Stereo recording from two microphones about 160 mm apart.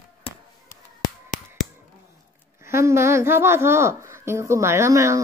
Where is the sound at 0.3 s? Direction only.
35° left (ahead or behind).